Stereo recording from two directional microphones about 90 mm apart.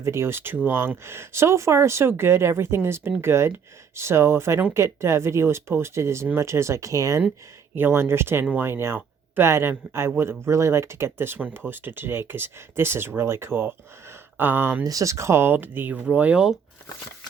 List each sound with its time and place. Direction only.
0.0 s speech: 30° right (ahead or behind)
7.8 s speech: 25° right (ahead or behind)
14.8 s speech: 35° right (ahead or behind); by 16.6 s 10° right (ahead or behind)